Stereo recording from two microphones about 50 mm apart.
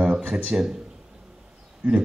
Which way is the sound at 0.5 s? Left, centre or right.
Centre.